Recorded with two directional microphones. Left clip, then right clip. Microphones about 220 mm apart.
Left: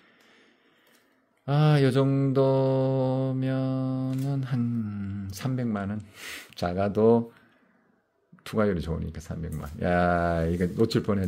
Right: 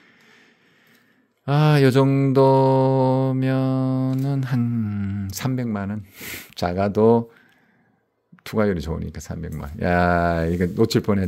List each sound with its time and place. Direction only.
0.0 s a sound: 25° right (ahead or behind)
1.4 s mantra: 30° right (ahead or behind)
8.5 s speech: 25° right (ahead or behind)